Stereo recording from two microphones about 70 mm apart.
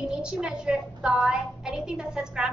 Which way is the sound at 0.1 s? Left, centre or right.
Centre.